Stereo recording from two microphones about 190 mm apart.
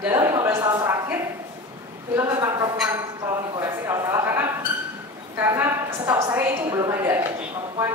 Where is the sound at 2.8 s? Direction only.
15° right (ahead or behind).